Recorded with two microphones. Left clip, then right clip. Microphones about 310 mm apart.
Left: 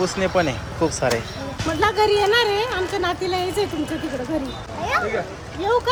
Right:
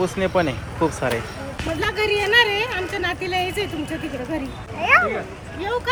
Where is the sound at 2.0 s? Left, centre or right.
Centre.